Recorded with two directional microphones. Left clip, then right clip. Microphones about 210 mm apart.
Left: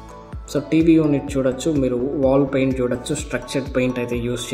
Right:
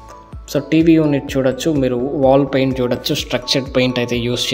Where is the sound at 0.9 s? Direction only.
20° right (ahead or behind).